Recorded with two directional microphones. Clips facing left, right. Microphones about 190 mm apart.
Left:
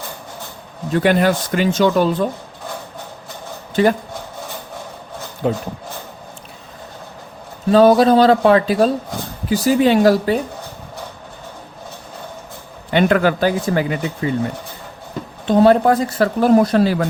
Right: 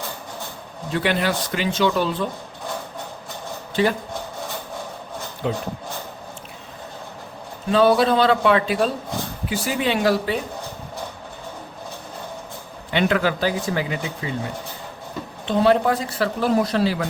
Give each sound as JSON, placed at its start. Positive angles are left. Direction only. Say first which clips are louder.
{"t": 0.9, "sound": "speech", "louder": "left 7 dB", "side_deg": 45}
{"t": 3.8, "sound": "speech", "louder": "left 5 dB", "side_deg": 50}
{"t": 5.4, "sound": "speech", "louder": "left 5 dB", "side_deg": 45}
{"t": 7.7, "sound": "a man's voice", "louder": "left 6 dB", "side_deg": 40}
{"t": 12.9, "sound": "speech", "louder": "left 5 dB", "side_deg": 50}
{"t": 15.4, "sound": "speech", "louder": "left 6 dB", "side_deg": 45}